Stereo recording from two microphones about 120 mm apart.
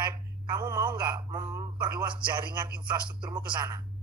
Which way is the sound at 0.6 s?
25° right (ahead or behind).